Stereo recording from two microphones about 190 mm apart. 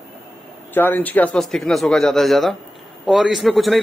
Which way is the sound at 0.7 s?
10° left (ahead or behind).